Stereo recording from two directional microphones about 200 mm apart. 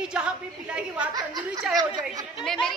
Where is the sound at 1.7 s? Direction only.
20° right (ahead or behind).